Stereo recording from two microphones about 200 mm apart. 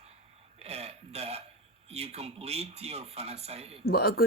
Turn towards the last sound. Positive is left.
turn(degrees=50)  # may be behind; listen again after turning